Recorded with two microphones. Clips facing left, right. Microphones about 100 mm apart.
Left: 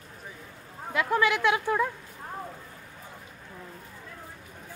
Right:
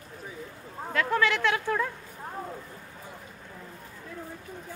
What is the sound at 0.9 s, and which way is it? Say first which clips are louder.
Speech: left 1 dB; 15° left (ahead or behind).